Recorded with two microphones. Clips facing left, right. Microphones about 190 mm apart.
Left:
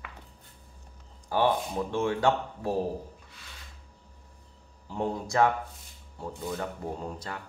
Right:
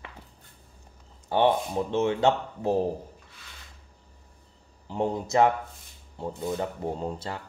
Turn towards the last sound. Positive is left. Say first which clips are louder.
# right 4 dB
turn(degrees=-25)  # may be behind; listen again after turning